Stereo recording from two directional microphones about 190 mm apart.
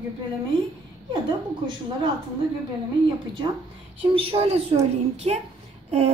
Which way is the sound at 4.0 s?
30° right (ahead or behind).